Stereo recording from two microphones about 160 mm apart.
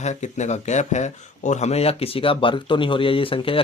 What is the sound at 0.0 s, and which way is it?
Speech, 45° left (ahead or behind).